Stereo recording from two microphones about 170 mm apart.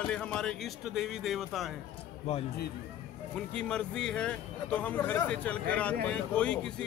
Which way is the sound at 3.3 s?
5° left (ahead or behind).